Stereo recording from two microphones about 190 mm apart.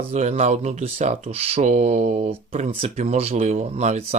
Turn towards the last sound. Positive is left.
turn(degrees=-35)  # may be behind; listen again after turning